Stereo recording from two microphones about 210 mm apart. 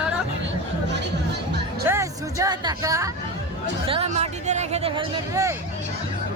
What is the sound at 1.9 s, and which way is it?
Speech, 15° right (ahead or behind).